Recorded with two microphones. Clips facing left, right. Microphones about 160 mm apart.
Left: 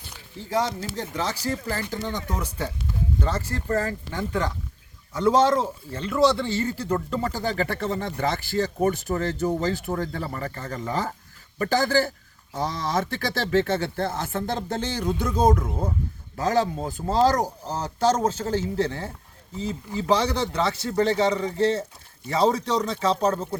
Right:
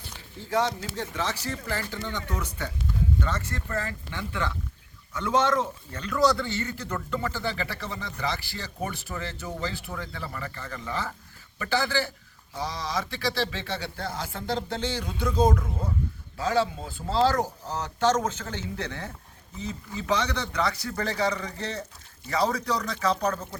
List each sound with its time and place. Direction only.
0.5 s speech: 40° left (ahead or behind)